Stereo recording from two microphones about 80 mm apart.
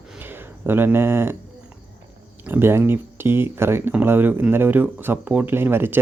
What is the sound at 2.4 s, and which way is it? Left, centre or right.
Speech, right.